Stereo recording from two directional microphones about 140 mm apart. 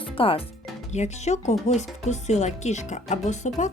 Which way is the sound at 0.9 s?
55° left (ahead or behind).